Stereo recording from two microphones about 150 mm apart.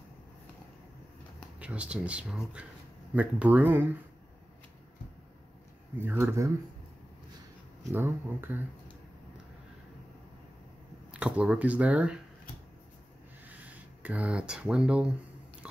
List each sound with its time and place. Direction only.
1.6 s speech: 10° right (ahead or behind)
5.9 s speech: 15° right (ahead or behind)
7.9 s speech: 15° right (ahead or behind)
11.1 s speech: 5° right (ahead or behind)
13.5 s speech: 10° right (ahead or behind)